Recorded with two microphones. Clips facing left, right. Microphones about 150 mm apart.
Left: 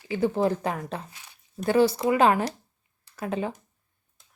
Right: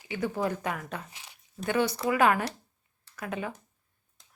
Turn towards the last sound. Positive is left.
turn(degrees=30)  # may be behind; listen again after turning